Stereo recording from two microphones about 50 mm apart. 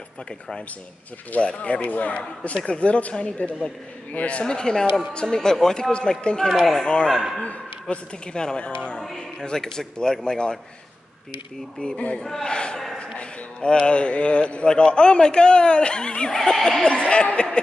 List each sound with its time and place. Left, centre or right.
1.4 s speech: left
6.5 s speech: centre
7.9 s speech: centre
12.2 s speech: centre
12.8 s a sound: centre
13.2 s speech: left
16.8 s speech: left